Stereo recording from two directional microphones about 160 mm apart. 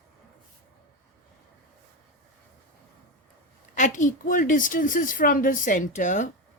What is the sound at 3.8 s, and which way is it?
A woman's voice, 50° left (ahead or behind).